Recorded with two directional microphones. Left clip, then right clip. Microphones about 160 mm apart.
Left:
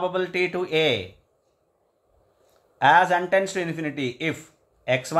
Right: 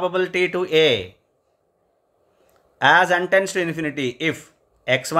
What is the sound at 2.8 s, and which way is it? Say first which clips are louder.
Speech: right 2 dB; 30° right (ahead or behind).